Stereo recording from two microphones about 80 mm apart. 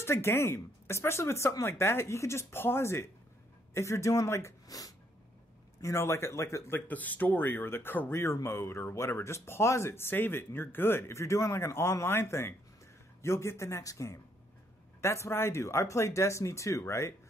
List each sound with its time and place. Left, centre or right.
0.0 s speech: left
4.6 s speech: left
5.8 s speech: left
6.9 s speech: left
8.2 s speech: left